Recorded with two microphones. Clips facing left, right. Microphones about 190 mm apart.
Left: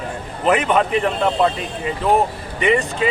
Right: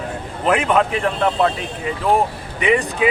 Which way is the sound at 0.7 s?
5° left (ahead or behind).